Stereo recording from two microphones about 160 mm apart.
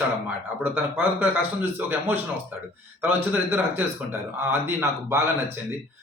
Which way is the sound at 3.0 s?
10° right (ahead or behind).